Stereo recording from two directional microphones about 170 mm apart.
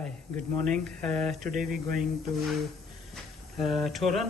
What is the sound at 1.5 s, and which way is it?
Speech, 55° right (ahead or behind).